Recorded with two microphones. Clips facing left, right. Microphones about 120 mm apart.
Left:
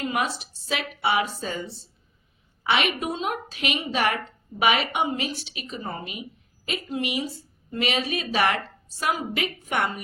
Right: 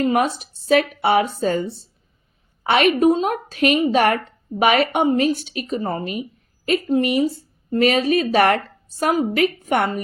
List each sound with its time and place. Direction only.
0.0 s a woman's voice: 45° right (ahead or behind)